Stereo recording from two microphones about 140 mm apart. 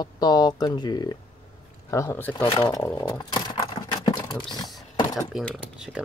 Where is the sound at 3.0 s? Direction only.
30° left (ahead or behind).